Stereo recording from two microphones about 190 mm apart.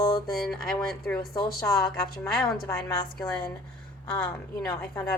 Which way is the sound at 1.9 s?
5° left (ahead or behind).